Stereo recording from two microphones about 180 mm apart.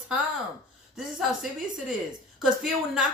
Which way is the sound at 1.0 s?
5° right (ahead or behind).